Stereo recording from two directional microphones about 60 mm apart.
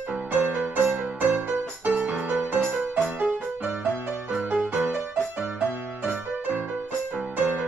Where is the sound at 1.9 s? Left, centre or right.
Centre.